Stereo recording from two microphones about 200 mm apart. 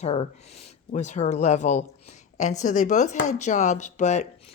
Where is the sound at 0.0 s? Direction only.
30° left (ahead or behind).